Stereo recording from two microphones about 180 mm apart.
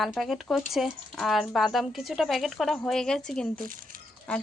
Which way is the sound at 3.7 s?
50° right (ahead or behind).